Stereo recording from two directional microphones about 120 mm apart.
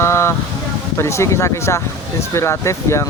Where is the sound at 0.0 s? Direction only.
20° left (ahead or behind).